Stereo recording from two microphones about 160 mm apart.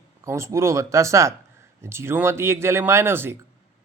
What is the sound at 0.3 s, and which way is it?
A man's voice, 15° right (ahead or behind).